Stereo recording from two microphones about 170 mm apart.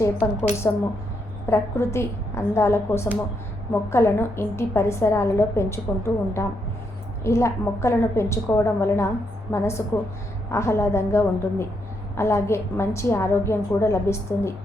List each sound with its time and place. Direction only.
0.0 s a woman's voice: 15° left (ahead or behind)